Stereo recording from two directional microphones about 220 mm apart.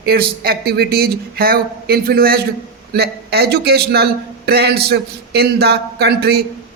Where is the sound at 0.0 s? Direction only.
45° right (ahead or behind).